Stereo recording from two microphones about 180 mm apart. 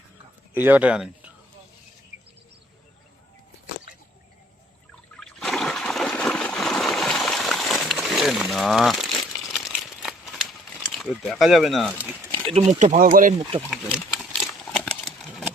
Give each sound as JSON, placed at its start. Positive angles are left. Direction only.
{"t": 0.5, "sound": "speech", "side_deg": -10}
{"t": 5.2, "sound": "trickle", "side_deg": 0}
{"t": 7.9, "sound": "crumpling", "side_deg": 0}
{"t": 12.5, "sound": "speech", "side_deg": -40}
{"t": 13.7, "sound": "a sound", "side_deg": -5}